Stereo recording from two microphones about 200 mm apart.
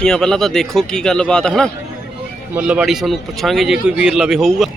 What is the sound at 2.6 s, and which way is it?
Speech, 5° right (ahead or behind).